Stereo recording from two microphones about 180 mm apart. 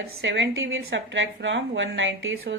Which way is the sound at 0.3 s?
90° right.